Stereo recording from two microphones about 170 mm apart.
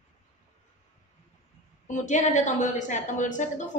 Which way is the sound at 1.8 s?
45° left (ahead or behind).